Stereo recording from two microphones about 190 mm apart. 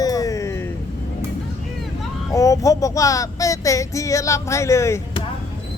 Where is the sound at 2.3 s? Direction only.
15° left (ahead or behind).